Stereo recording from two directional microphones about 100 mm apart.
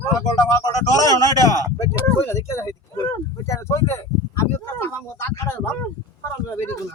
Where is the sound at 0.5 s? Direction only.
40° left (ahead or behind).